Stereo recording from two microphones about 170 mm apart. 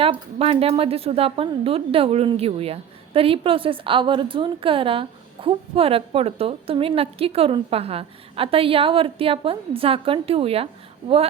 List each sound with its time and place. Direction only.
0.0 s speech: 35° right (ahead or behind)